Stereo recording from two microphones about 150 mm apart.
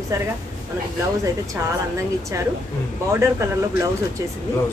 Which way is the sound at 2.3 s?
20° right (ahead or behind).